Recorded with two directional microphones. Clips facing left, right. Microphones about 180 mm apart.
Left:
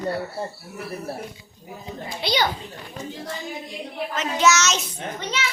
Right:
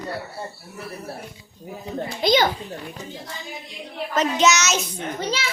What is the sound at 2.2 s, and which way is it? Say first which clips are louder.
Speech: right 5 dB; 45° right (ahead or behind).